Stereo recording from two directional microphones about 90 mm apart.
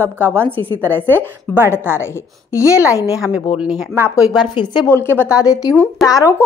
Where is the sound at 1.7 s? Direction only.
25° left (ahead or behind).